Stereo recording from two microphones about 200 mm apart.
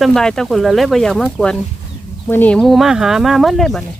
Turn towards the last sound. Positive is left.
turn(degrees=0)  # may be behind; listen again after turning